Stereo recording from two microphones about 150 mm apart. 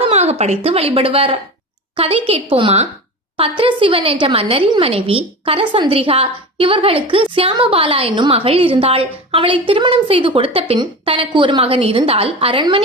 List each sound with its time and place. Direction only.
0.0 s a woman's voice: 45° right (ahead or behind)